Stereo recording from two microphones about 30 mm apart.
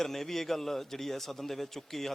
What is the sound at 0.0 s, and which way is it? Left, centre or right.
A man's voice, centre.